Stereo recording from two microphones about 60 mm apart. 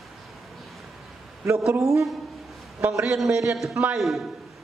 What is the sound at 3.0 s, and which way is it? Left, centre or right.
A man's voice, centre.